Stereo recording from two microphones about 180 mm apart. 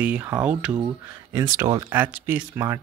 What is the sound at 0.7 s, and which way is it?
Speech, 15° right (ahead or behind).